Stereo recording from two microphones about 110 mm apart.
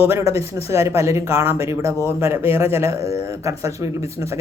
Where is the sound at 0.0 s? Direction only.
25° right (ahead or behind).